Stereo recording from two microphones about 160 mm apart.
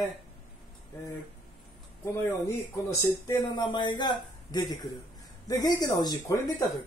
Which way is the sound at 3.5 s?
30° left (ahead or behind).